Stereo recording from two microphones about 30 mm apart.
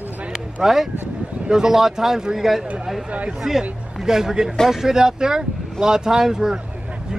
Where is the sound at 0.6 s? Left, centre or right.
Centre.